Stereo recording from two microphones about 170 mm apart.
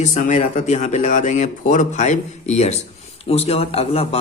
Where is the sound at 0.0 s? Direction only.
45° left (ahead or behind).